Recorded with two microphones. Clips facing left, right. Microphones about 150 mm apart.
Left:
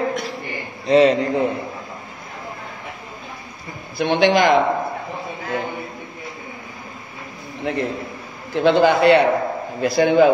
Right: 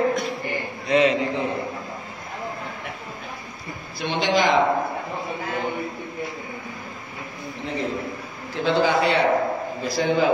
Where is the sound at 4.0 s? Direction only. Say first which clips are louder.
Left 6 dB; 55° left (ahead or behind).